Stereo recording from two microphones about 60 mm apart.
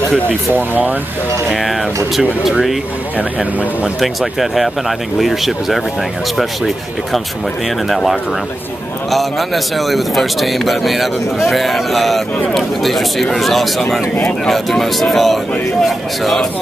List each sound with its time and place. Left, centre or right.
0.5 s speech: right
1.5 s a man's voice: centre
4.0 s a man's voice: centre